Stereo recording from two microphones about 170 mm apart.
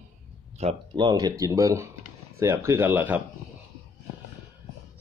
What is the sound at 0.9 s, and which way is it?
A man's voice, 25° right (ahead or behind).